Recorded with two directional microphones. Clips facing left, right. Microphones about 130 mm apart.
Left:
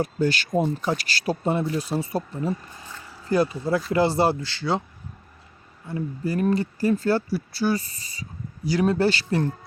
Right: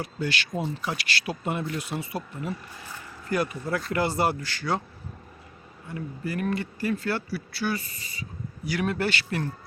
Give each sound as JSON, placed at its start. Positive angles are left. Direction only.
{"t": 0.0, "sound": "speech", "side_deg": 40}
{"t": 5.9, "sound": "speech", "side_deg": 35}